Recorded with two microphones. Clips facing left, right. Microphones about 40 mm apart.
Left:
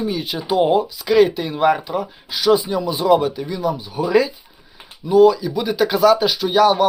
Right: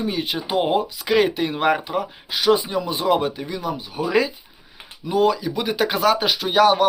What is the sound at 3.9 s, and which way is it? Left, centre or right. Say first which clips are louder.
Speech: left 3 dB; right.